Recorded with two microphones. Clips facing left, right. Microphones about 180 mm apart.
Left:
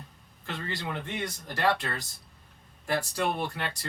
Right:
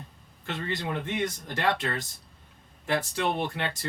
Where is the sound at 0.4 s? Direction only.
20° right (ahead or behind).